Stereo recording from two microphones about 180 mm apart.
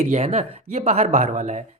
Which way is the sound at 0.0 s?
40° right (ahead or behind).